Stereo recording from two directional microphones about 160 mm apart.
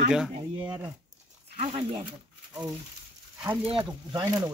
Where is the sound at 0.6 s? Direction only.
15° right (ahead or behind).